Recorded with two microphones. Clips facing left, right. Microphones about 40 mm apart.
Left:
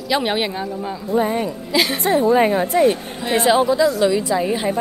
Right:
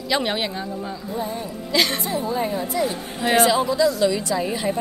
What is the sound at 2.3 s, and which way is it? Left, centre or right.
Speech, left.